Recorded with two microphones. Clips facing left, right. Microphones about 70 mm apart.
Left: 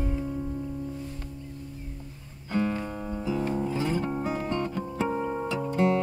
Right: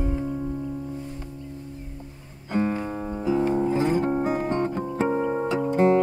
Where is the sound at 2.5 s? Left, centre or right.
Right.